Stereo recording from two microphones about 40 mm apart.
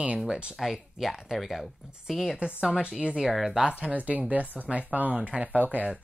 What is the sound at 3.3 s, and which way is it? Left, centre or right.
Speech, centre.